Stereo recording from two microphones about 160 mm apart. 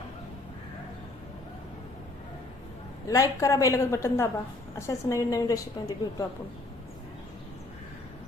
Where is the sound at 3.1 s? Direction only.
20° left (ahead or behind).